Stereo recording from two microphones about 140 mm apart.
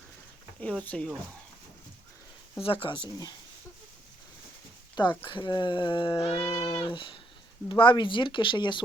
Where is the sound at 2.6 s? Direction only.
40° left (ahead or behind).